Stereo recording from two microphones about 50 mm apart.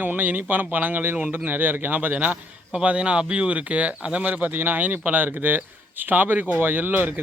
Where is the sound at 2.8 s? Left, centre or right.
Right.